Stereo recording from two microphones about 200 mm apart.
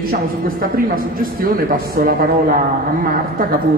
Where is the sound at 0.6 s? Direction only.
45° right (ahead or behind).